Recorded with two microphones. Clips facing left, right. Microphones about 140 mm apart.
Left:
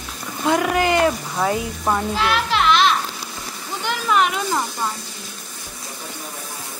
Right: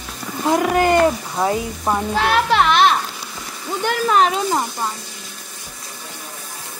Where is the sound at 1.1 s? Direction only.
20° right (ahead or behind).